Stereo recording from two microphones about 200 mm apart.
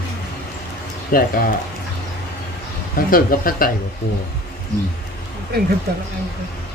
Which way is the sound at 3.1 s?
45° left (ahead or behind).